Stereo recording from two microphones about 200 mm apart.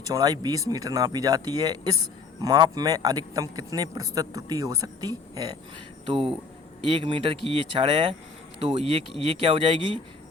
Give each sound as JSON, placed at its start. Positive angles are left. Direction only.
{"t": 0.1, "sound": "a man's voice", "side_deg": -20}